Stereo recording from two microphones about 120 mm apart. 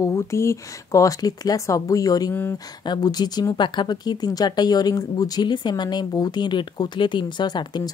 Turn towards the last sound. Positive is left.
turn(degrees=35)  # may be behind; listen again after turning